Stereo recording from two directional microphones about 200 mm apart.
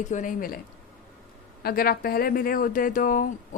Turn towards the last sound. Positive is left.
turn(degrees=45)  # may be behind; listen again after turning